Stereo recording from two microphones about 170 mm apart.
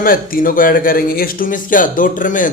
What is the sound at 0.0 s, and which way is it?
Speech, 55° left (ahead or behind).